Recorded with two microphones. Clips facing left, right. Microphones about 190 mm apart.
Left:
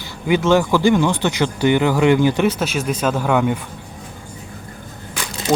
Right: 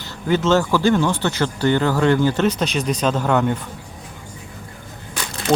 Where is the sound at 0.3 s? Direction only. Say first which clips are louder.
Left 2 dB; 15° left (ahead or behind).